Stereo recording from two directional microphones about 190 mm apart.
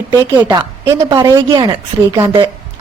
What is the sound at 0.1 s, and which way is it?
A woman's voice, 15° right (ahead or behind).